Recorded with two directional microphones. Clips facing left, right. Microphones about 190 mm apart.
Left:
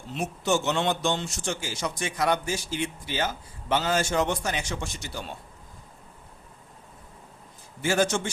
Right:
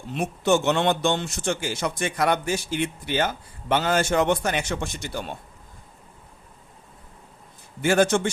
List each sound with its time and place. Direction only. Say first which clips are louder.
0.1 s a man's voice: right 4 dB; 60° right (ahead or behind)
7.8 s a man's voice: right 5 dB; 60° right (ahead or behind)